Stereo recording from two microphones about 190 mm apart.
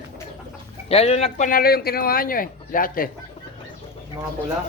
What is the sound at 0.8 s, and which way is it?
Speech, 30° left (ahead or behind).